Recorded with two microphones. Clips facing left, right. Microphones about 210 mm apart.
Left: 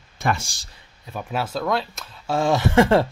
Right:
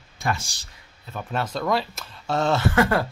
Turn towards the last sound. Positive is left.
turn(degrees=25)  # may be behind; listen again after turning